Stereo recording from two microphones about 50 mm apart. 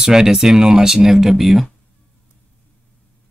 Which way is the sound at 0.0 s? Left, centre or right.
Centre.